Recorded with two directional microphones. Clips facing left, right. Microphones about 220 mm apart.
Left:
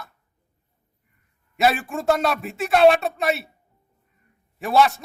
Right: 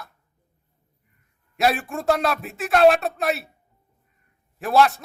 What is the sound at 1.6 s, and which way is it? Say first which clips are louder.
A man's voice: left 1 dB; centre (ahead or behind).